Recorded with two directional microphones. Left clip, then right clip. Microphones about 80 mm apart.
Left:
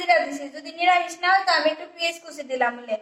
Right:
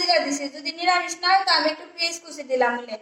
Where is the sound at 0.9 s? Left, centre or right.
Right.